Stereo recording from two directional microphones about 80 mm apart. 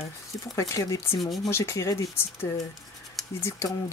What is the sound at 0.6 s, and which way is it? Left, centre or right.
Speech, left.